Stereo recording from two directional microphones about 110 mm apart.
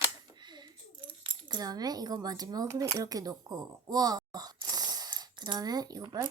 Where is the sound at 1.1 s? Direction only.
55° right (ahead or behind).